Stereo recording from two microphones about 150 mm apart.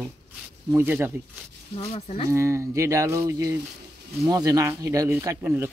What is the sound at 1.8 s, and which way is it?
Speech, 40° left (ahead or behind).